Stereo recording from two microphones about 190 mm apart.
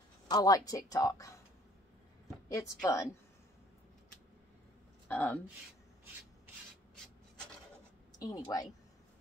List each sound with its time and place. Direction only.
0.3 s speech: 20° left (ahead or behind)
2.5 s speech: 15° left (ahead or behind)
5.0 s a woman's voice: 10° left (ahead or behind)
8.2 s speech: 20° left (ahead or behind)